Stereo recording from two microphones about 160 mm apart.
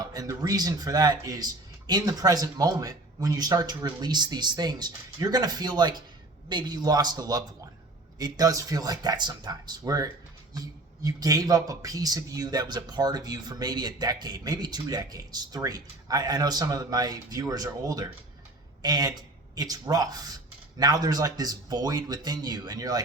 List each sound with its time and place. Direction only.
0.0 s speech: 25° right (ahead or behind)